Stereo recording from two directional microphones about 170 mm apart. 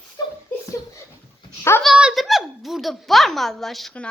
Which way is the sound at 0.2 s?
25° left (ahead or behind).